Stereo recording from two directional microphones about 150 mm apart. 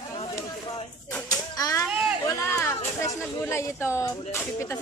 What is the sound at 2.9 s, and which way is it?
Speech, 15° left (ahead or behind).